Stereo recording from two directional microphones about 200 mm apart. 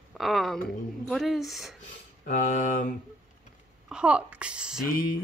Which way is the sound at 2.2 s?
40° left (ahead or behind).